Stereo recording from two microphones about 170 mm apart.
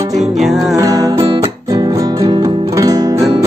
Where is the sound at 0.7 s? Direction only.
20° right (ahead or behind).